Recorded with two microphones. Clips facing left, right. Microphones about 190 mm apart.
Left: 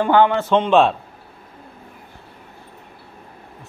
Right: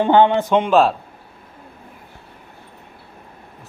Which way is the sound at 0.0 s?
20° right (ahead or behind).